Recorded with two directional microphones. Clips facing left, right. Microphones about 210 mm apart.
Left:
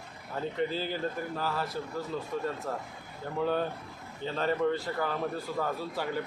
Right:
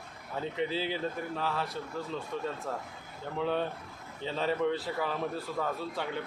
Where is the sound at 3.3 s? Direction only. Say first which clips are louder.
Left 2 dB; 5° left (ahead or behind).